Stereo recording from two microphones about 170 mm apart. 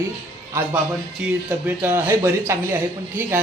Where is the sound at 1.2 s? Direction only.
5° right (ahead or behind).